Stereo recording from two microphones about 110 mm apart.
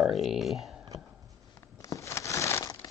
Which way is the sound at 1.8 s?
30° left (ahead or behind).